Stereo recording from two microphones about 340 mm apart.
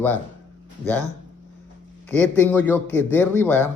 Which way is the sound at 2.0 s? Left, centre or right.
Centre.